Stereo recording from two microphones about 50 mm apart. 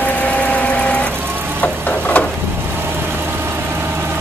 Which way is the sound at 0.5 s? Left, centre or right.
Left.